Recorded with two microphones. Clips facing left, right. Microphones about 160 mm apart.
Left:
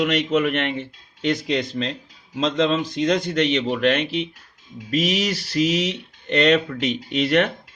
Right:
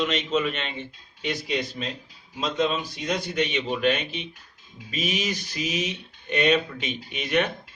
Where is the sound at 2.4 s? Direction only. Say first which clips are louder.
Left 5 dB; 90° left.